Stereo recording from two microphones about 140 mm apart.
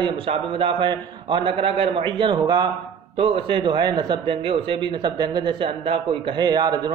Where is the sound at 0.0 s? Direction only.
40° right (ahead or behind).